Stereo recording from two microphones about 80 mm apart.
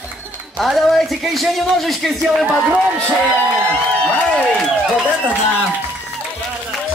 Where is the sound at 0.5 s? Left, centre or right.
Centre.